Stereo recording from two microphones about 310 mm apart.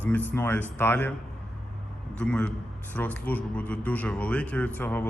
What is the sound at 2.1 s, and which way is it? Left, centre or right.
A man's voice, centre.